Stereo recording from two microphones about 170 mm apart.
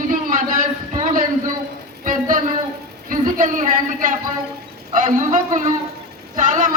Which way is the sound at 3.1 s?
50° right (ahead or behind).